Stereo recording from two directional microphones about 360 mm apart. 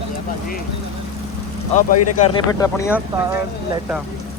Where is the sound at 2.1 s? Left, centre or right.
Centre.